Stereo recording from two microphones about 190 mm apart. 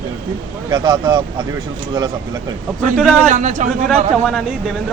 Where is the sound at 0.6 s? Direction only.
20° right (ahead or behind).